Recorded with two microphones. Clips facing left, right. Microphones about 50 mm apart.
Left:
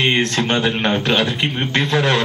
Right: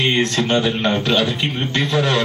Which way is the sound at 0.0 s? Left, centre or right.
Left.